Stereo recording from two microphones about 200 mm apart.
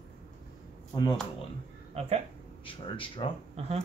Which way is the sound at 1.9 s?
30° right (ahead or behind).